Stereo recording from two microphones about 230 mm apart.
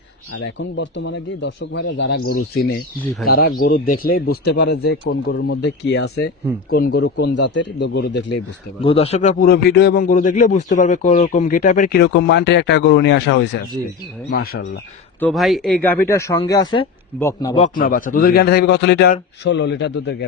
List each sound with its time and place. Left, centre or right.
0.3 s speech: left
8.8 s a man's voice: left
15.2 s speech: centre
17.5 s a man's voice: left